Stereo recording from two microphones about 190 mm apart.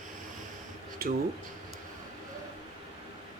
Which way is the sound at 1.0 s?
50° right (ahead or behind).